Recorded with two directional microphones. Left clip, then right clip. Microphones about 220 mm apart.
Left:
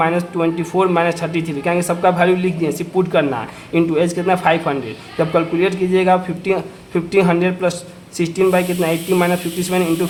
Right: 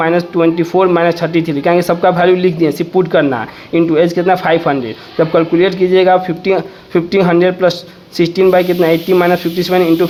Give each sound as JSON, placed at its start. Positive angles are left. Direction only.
{"t": 0.0, "sound": "speech", "side_deg": -25}